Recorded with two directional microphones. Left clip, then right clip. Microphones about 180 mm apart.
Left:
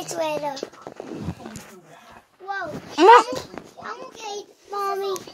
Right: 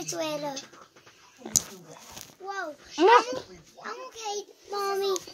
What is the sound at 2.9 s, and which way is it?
Speech, 20° left (ahead or behind).